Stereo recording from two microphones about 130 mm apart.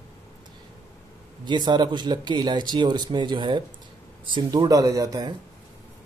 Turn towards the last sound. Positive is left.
turn(degrees=-30)  # may be behind; listen again after turning